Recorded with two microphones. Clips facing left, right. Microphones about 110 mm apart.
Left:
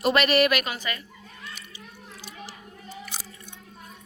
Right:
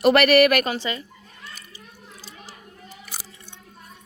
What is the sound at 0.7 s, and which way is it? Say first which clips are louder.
Speech: right 5 dB; 25° right (ahead or behind).